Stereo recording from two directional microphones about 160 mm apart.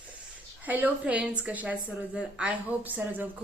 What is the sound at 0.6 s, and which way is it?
Speech, 10° right (ahead or behind).